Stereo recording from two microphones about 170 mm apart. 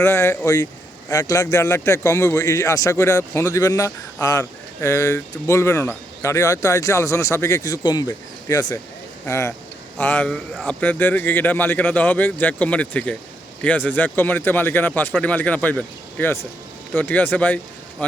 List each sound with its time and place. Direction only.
0.0 s a man's voice: 15° left (ahead or behind)